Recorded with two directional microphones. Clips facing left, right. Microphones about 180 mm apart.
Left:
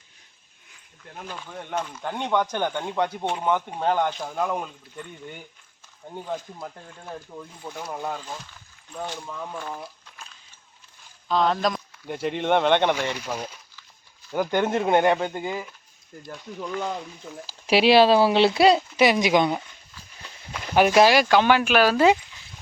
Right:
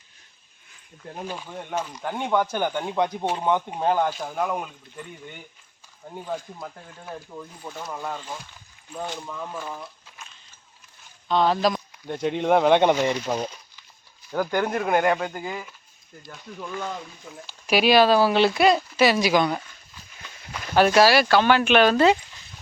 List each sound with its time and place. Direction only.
1.1 s speech: 10° right (ahead or behind)
6.1 s speech: centre (ahead or behind)
9.2 s speech: centre (ahead or behind)
11.3 s speech: centre (ahead or behind)
14.3 s speech: 20° left (ahead or behind)
17.4 s speech: 30° left (ahead or behind)
18.9 s speech: 20° left (ahead or behind)
20.7 s speech: 15° left (ahead or behind)
21.6 s speech: 5° left (ahead or behind)